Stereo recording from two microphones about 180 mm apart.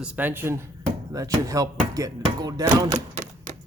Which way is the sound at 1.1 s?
20° right (ahead or behind).